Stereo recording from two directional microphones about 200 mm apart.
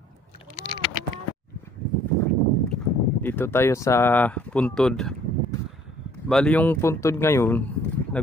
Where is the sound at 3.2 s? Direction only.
10° left (ahead or behind).